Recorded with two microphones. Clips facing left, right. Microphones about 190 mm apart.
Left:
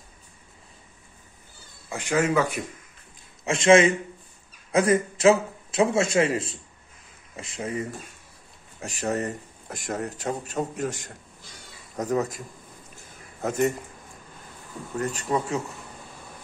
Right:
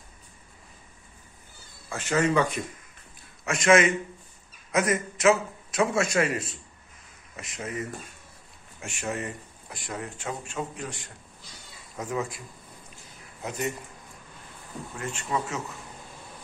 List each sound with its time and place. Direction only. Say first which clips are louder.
1.9 s speech: left 1 dB; 15° left (ahead or behind)
3.4 s a man's voice: left 3 dB; 25° left (ahead or behind)
12.9 s a sound: left 2 dB; 45° left (ahead or behind)
15.0 s a man's voice: left 8 dB; 40° left (ahead or behind)